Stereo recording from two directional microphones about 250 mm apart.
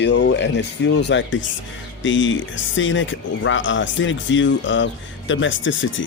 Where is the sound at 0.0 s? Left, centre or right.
Left.